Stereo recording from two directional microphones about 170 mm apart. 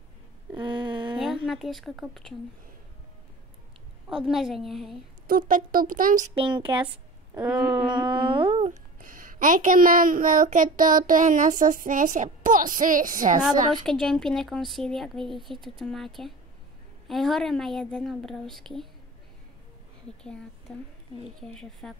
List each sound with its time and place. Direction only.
0.5 s a sound: 30° right (ahead or behind)
1.1 s a woman's voice: 5° right (ahead or behind)
4.2 s a woman's voice: 5° right (ahead or behind)
5.2 s speech: 55° right (ahead or behind)
6.3 s speech: 30° right (ahead or behind)
9.0 s a child's voice: 50° right (ahead or behind)
13.8 s a woman's voice: 5° left (ahead or behind)
20.7 s a woman's voice: 5° left (ahead or behind)